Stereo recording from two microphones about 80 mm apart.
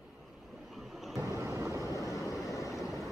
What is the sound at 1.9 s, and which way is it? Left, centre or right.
Waves, left.